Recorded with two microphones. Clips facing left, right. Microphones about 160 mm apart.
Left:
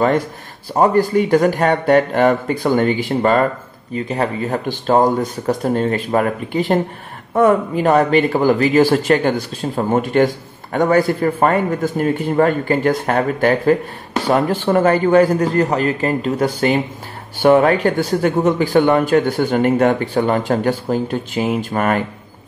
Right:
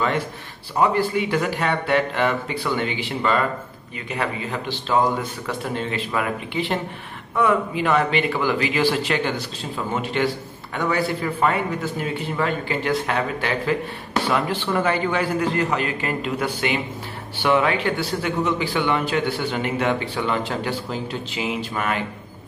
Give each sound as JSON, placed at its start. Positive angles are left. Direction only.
{"t": 0.7, "sound": "speech", "side_deg": 45}